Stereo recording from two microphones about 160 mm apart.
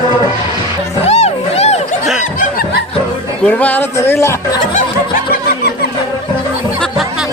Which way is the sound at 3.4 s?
10° left (ahead or behind).